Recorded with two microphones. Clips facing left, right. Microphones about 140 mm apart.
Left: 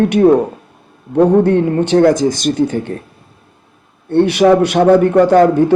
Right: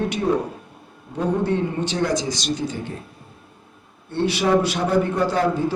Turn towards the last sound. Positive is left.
turn(degrees=65)  # may be behind; listen again after turning